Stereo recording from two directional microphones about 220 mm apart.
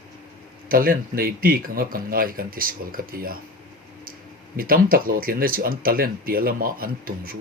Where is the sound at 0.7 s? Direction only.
40° right (ahead or behind).